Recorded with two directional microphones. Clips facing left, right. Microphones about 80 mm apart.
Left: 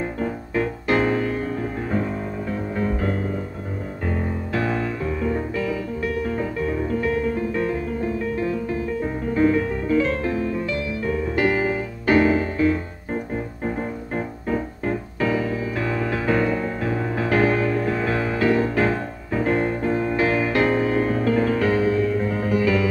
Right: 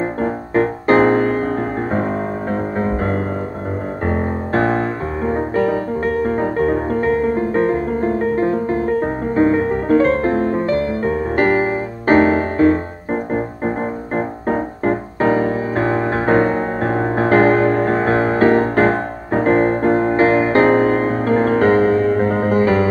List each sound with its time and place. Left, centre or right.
0.2 s music: right
2.8 s music: right
9.3 s music: right